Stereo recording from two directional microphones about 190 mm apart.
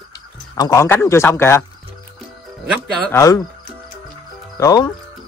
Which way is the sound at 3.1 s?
20° left (ahead or behind).